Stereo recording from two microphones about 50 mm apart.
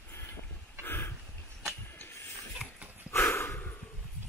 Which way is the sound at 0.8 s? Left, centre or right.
Left.